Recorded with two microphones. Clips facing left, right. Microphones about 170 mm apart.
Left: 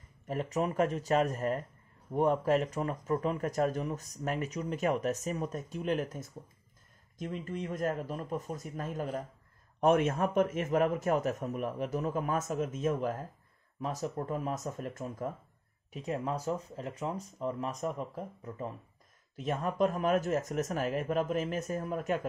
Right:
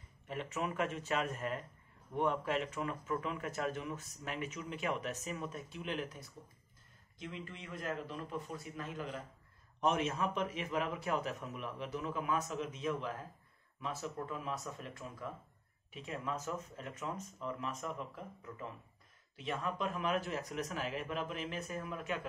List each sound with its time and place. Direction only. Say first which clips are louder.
0.3 s a man's voice: left 7 dB; 40° left (ahead or behind)